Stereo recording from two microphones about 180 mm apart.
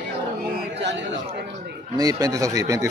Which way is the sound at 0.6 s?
75° right (ahead or behind).